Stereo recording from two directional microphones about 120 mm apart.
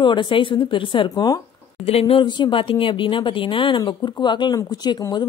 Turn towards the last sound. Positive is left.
turn(degrees=35)  # may be behind; listen again after turning